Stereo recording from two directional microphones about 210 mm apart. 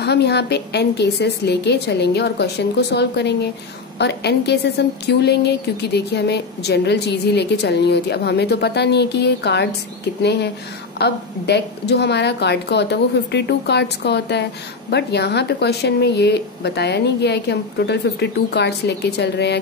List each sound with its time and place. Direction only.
0.0 s speech: 50° left (ahead or behind)